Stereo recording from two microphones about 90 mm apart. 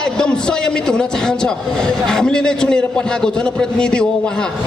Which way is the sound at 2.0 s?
5° left (ahead or behind).